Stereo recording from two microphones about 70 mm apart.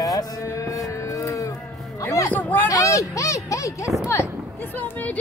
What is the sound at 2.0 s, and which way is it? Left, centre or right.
Speech, left.